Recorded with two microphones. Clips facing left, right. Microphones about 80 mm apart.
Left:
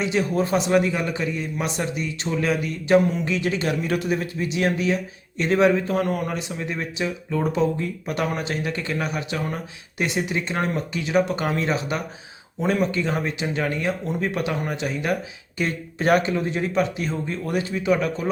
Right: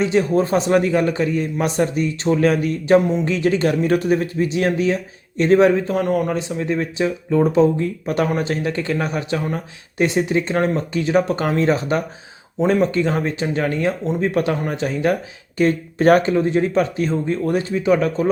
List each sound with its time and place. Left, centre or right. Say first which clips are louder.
0.0 s speech: right 5 dB; right